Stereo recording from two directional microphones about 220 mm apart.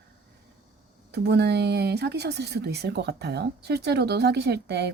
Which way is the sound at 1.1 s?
50° right (ahead or behind).